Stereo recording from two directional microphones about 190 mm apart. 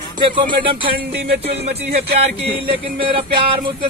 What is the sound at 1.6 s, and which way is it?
Speech, 35° right (ahead or behind).